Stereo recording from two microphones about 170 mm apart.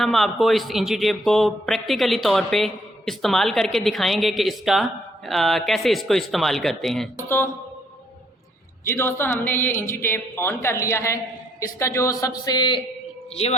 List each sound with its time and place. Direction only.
0.0 s a man's voice: centre (ahead or behind)
7.3 s a woman's voice: 15° left (ahead or behind)
8.8 s a woman's voice: 15° left (ahead or behind)
13.3 s speech: 35° left (ahead or behind)